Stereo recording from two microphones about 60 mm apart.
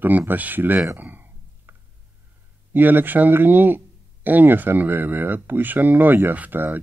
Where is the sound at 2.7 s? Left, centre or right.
Right.